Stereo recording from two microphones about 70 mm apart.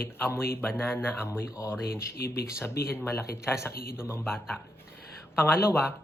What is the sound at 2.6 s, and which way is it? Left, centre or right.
Speech, left.